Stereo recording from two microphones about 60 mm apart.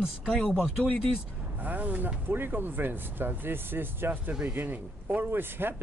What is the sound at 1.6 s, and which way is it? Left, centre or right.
Speech, right.